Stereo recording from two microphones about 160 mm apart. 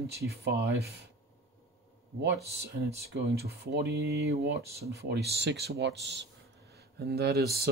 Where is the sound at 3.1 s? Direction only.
85° right.